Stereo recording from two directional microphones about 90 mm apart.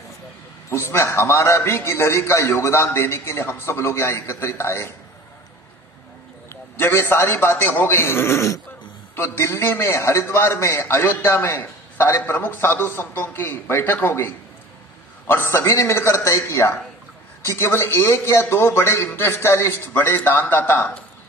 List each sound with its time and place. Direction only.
0.7 s a man's voice: 30° left (ahead or behind)
6.5 s a man's voice: 25° left (ahead or behind)